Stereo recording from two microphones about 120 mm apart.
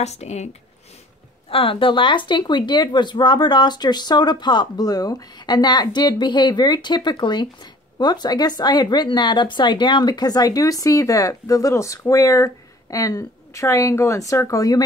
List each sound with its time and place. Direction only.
0.0 s speech: 65° left (ahead or behind)
1.5 s speech: 50° left (ahead or behind); by 14.9 s 30° left (ahead or behind)